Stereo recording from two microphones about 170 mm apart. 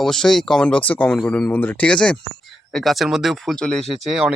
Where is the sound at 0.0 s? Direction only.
5° left (ahead or behind).